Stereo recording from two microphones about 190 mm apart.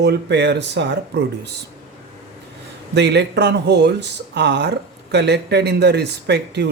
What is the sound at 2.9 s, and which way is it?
A woman's voice, 65° right (ahead or behind).